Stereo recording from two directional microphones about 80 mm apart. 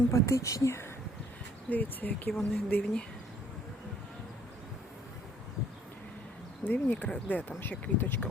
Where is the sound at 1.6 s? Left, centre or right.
Left.